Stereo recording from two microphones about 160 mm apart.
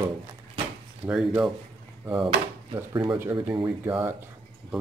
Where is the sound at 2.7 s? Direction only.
30° right (ahead or behind).